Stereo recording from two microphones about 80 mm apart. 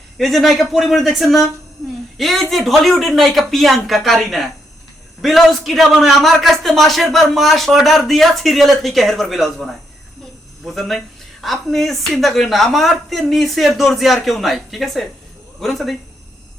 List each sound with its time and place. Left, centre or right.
0.2 s a man's voice: centre
10.8 s a man's voice: centre